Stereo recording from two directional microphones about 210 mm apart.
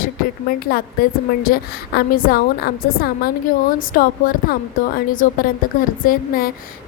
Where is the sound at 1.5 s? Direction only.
45° left (ahead or behind).